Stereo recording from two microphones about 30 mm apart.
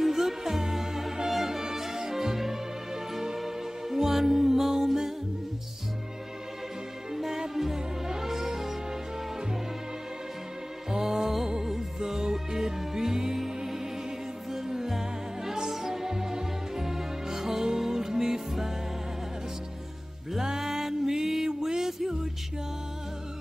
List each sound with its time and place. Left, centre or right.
0.0 s music: centre
7.1 s music: centre
10.9 s music: centre
20.4 s music: centre